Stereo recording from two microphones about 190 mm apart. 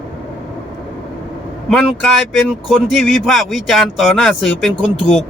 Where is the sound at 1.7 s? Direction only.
Centre (ahead or behind).